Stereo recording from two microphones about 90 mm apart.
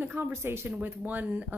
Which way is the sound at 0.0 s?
25° right (ahead or behind).